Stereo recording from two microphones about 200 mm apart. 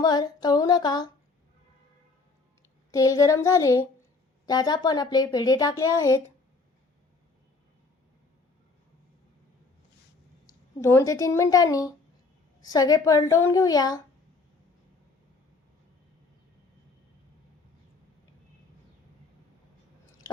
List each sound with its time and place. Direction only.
0.0 s speech: 20° left (ahead or behind)
2.9 s a woman's voice: 15° left (ahead or behind)
10.8 s a woman's voice: 15° left (ahead or behind)